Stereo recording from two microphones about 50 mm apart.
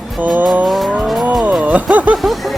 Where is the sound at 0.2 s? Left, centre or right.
Right.